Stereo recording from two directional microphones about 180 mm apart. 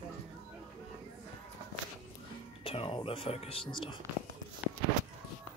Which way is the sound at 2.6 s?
30° left (ahead or behind).